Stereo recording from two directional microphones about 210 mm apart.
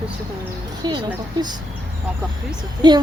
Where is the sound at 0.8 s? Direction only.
20° right (ahead or behind).